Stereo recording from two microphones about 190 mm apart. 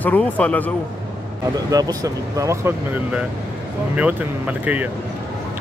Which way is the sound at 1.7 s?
20° right (ahead or behind).